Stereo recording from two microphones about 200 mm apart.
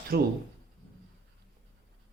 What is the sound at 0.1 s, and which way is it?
Speech, 50° right (ahead or behind).